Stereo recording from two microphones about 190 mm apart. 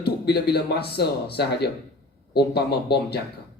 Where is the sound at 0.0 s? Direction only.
60° left (ahead or behind).